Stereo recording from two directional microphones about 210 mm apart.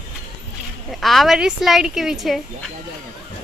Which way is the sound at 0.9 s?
Centre (ahead or behind).